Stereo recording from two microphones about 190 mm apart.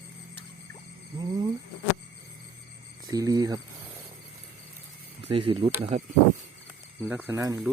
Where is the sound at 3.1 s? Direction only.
20° right (ahead or behind).